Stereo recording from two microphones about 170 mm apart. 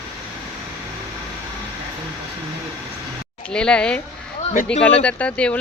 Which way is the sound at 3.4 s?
5° left (ahead or behind).